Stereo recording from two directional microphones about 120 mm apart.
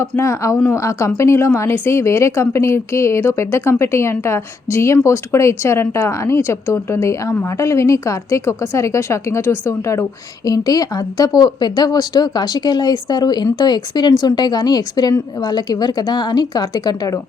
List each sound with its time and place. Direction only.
0.2 s speech: 25° left (ahead or behind)